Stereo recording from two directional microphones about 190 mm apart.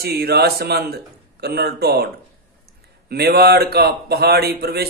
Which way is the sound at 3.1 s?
55° right (ahead or behind).